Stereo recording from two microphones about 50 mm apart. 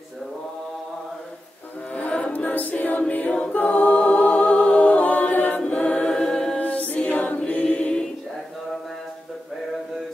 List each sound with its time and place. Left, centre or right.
1.9 s music: left
2.3 s a capella: left
5.6 s a capella: left
6.6 s music: left